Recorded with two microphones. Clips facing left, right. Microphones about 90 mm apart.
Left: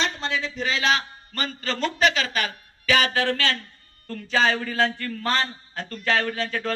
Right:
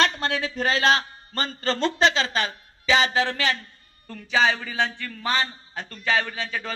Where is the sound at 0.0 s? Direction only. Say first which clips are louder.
Right 3 dB; 55° right (ahead or behind); by 3.5 s 20° right (ahead or behind).